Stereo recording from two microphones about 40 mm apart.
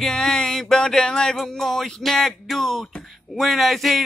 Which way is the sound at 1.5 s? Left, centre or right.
Centre.